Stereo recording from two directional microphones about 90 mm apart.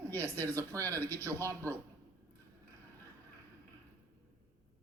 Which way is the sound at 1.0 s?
20° left (ahead or behind).